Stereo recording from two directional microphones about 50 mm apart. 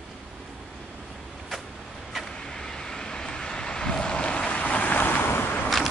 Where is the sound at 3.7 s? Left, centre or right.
Centre; by 5.1 s left.